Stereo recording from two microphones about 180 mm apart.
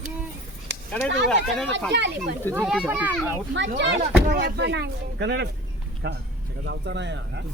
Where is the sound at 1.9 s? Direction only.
70° right (ahead or behind).